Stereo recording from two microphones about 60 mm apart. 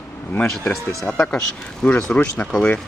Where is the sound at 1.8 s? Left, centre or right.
Left.